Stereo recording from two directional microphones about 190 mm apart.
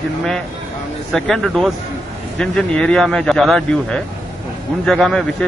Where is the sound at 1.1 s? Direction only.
Centre (ahead or behind).